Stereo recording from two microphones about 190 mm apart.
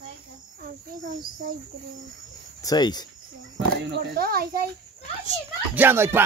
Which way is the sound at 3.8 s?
55° right (ahead or behind).